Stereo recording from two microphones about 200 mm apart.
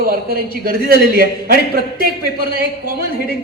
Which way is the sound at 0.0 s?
45° right (ahead or behind).